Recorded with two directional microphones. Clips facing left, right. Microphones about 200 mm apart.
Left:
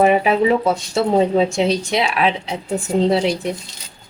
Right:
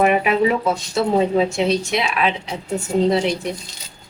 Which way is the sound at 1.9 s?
30° left (ahead or behind).